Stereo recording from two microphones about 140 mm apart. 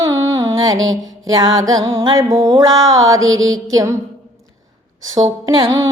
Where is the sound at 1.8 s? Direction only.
40° right (ahead or behind).